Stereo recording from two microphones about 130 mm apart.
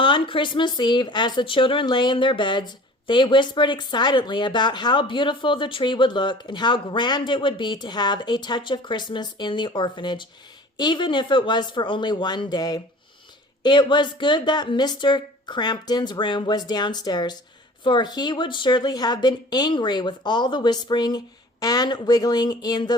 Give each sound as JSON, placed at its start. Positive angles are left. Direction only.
{"t": 0.0, "sound": "speech", "side_deg": 40}